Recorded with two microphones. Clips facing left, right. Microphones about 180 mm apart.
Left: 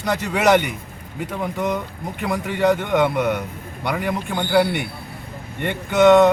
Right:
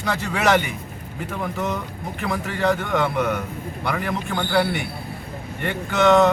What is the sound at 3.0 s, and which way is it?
A man's voice, 5° left (ahead or behind).